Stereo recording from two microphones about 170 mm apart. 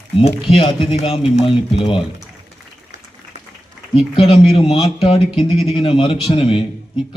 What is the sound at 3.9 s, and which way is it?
Speech, 35° left (ahead or behind).